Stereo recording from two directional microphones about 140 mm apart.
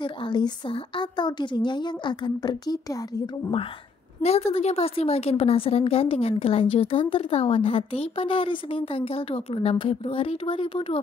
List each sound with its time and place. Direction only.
0.0 s a woman's voice: 35° left (ahead or behind)
4.2 s a woman's voice: 45° left (ahead or behind)